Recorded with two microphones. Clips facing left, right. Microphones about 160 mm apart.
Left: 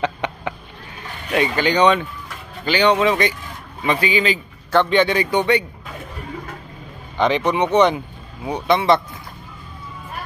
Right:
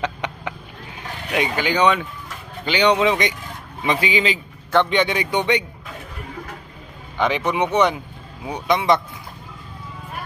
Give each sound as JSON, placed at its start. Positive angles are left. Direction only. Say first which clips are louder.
{"t": 1.3, "sound": "speech", "louder": "left 3 dB", "side_deg": -10}
{"t": 7.2, "sound": "speech", "louder": "left 2 dB", "side_deg": -10}